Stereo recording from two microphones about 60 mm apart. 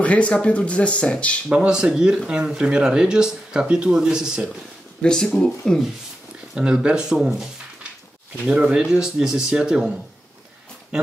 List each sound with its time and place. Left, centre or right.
0.0 s speech: left
1.7 s speech: centre
5.0 s speech: centre
6.5 s speech: centre
7.1 s speech: centre
8.5 s speech: centre